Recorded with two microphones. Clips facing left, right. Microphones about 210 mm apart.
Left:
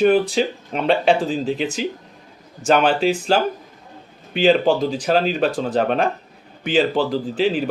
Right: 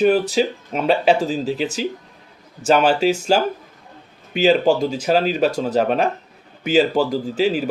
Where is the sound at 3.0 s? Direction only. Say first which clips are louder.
Right 1 dB; 40° right (ahead or behind).